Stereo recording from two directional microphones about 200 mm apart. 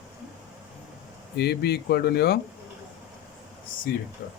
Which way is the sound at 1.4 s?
55° left (ahead or behind).